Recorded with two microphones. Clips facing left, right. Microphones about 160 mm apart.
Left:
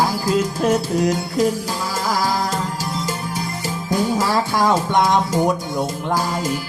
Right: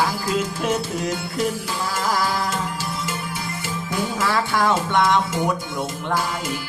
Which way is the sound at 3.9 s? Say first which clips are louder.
Left 4 dB; 35° left (ahead or behind).